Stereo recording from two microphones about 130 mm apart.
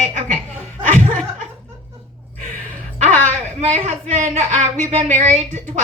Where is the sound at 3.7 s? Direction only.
65° right (ahead or behind).